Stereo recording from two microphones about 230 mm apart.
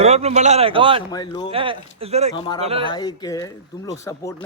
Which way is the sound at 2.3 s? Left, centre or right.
Centre.